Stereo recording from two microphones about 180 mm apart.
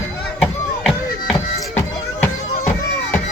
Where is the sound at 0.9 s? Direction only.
5° left (ahead or behind).